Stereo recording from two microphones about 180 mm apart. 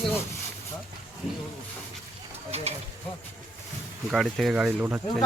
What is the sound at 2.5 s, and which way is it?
Speech, 35° right (ahead or behind).